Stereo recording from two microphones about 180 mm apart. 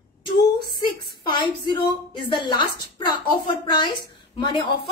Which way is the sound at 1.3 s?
25° left (ahead or behind).